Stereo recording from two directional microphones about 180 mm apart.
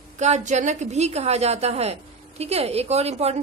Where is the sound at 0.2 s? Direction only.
40° right (ahead or behind).